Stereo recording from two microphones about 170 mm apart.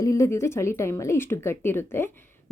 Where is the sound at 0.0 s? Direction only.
20° left (ahead or behind).